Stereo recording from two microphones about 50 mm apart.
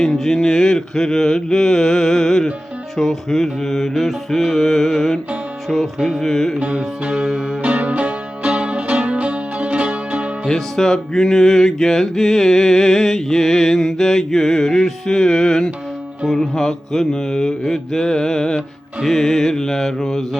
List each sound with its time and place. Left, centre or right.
0.0 s mantra: centre
2.9 s music: centre
6.6 s music: right
7.1 s music: centre
7.6 s music: right
10.5 s music: centre
16.3 s mantra: centre